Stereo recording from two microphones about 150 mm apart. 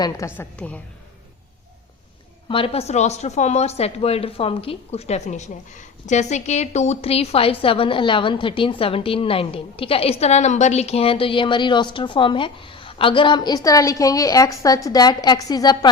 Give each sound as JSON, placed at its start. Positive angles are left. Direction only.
{"t": 0.3, "sound": "a woman's voice", "side_deg": 10}
{"t": 2.5, "sound": "speech", "side_deg": 40}